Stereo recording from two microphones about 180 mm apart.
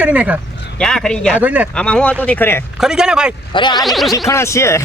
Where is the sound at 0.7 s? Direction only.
5° left (ahead or behind).